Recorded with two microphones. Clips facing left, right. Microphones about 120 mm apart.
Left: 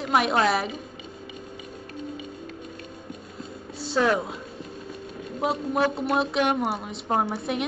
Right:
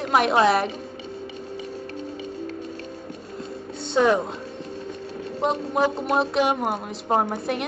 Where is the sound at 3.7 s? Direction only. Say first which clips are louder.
Right 3 dB; centre (ahead or behind).